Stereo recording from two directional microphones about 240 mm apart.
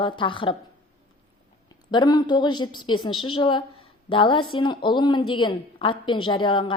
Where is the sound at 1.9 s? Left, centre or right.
Centre.